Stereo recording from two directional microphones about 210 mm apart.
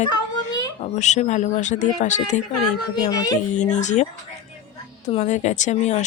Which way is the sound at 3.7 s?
35° left (ahead or behind).